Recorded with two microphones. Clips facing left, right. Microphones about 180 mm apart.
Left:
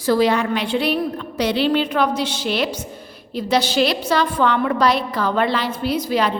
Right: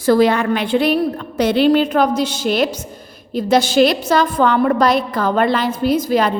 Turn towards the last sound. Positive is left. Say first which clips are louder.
# right 4 dB
turn(degrees=-45)  # may be behind; listen again after turning